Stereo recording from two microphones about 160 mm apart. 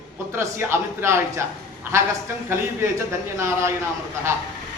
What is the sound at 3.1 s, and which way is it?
Speech, 15° right (ahead or behind).